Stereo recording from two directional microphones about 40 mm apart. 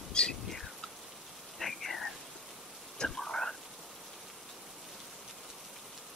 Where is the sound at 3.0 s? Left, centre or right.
Centre.